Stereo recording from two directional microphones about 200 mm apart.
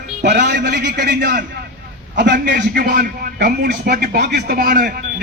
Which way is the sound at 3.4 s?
55° right (ahead or behind).